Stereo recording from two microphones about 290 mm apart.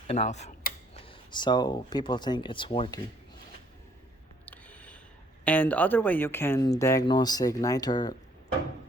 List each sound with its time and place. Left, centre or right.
0.1 s speech: left
4.4 s a sound: centre
5.5 s speech: centre